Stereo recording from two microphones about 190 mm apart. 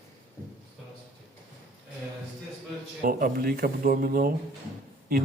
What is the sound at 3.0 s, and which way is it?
A man's voice, 50° right (ahead or behind).